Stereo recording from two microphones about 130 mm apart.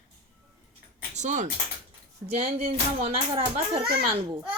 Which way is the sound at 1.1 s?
65° right (ahead or behind).